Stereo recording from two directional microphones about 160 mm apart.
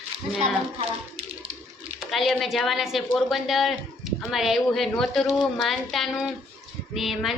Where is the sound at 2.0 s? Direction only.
Centre (ahead or behind).